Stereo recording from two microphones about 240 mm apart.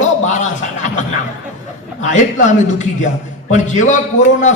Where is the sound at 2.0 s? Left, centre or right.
Left.